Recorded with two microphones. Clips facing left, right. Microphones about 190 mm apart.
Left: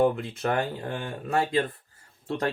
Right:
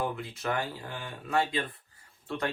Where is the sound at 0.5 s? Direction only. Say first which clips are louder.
Left 5 dB; 50° left (ahead or behind).